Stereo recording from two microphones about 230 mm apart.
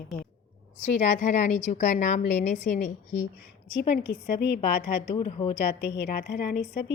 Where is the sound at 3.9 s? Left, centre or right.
Left.